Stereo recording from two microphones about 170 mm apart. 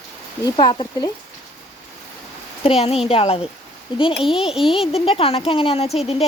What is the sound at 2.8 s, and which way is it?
Speech, 35° left (ahead or behind).